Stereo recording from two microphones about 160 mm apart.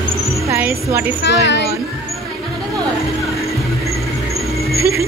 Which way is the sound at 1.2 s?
90° left.